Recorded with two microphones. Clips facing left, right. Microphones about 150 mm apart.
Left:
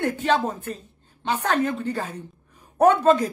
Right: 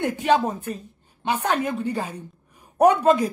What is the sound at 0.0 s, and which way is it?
A woman's voice, 15° right (ahead or behind).